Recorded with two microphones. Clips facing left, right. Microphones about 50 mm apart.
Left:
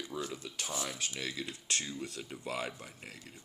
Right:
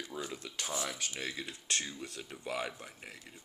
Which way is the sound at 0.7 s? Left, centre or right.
Centre.